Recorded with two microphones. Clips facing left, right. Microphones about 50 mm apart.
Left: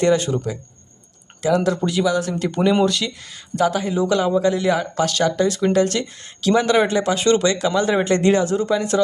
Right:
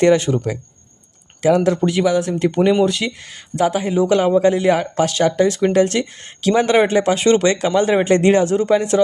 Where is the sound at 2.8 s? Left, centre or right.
Right.